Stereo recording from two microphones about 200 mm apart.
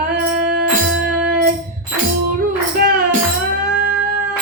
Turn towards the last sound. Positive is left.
turn(degrees=-50)  # may be behind; listen again after turning